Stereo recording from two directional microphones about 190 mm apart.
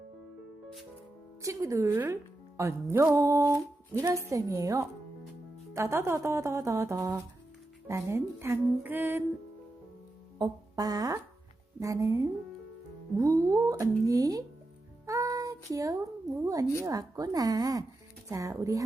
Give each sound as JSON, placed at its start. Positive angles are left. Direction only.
{"t": 1.4, "sound": "speech", "side_deg": -15}
{"t": 10.3, "sound": "music", "side_deg": -20}
{"t": 11.8, "sound": "speech", "side_deg": -15}
{"t": 15.0, "sound": "a sound", "side_deg": -15}
{"t": 16.8, "sound": "speech", "side_deg": -20}